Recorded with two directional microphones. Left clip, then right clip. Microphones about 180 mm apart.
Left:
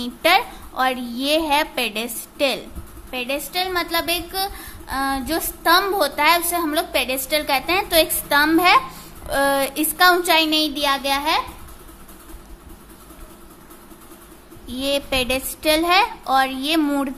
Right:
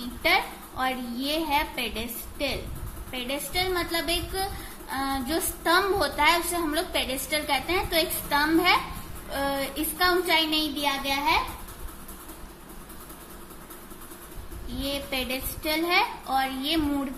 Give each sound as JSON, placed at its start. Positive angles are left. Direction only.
{"t": 0.2, "sound": "a woman's voice", "side_deg": 45}
{"t": 3.1, "sound": "a woman's voice", "side_deg": 35}
{"t": 14.7, "sound": "a woman's voice", "side_deg": 45}